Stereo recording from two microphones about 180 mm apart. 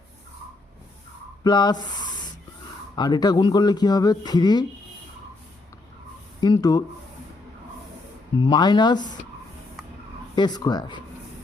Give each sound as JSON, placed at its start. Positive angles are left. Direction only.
{"t": 1.5, "sound": "speech", "side_deg": 25}
{"t": 2.9, "sound": "speech", "side_deg": 20}
{"t": 6.4, "sound": "speech", "side_deg": 20}
{"t": 8.4, "sound": "speech", "side_deg": 25}
{"t": 10.3, "sound": "speech", "side_deg": 25}